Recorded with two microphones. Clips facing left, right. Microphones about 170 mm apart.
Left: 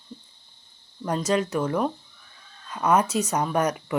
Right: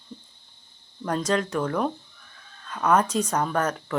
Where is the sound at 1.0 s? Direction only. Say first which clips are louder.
Left 1 dB; 10° left (ahead or behind).